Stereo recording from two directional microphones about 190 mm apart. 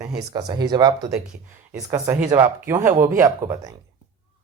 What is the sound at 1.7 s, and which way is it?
A man's voice, 10° right (ahead or behind).